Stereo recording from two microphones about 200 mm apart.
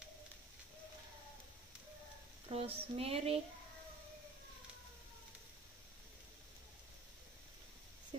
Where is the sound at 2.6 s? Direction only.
30° right (ahead or behind).